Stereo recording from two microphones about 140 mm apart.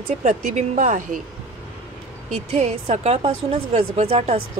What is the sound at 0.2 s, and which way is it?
Speech, 65° right (ahead or behind).